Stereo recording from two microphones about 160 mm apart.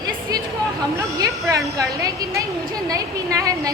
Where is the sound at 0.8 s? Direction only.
20° right (ahead or behind).